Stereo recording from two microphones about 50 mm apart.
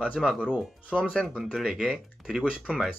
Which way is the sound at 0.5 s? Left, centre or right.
Centre.